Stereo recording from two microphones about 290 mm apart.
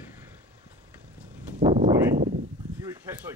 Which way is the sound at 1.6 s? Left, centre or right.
Centre.